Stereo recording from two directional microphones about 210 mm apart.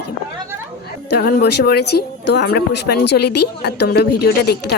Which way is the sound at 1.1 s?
50° left (ahead or behind).